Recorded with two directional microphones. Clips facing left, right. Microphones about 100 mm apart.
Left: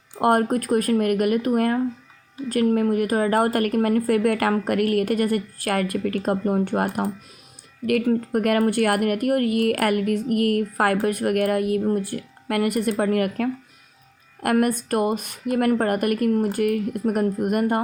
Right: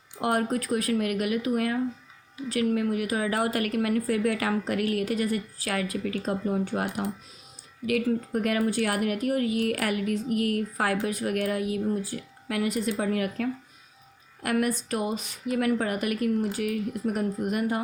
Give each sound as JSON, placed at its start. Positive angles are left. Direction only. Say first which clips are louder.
{"t": 0.2, "sound": "a woman's voice", "louder": "left 7 dB", "side_deg": 50}